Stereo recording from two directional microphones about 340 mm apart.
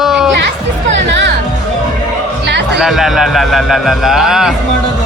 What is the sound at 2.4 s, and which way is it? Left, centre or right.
Chatter, right.